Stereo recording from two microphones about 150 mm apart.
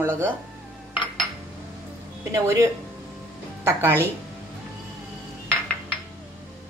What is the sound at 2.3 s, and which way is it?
Speech, 20° right (ahead or behind).